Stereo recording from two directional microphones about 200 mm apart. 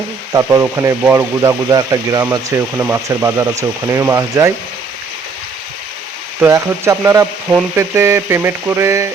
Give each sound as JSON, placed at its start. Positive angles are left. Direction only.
{"t": 0.3, "sound": "speech", "side_deg": -15}
{"t": 6.4, "sound": "speech", "side_deg": -10}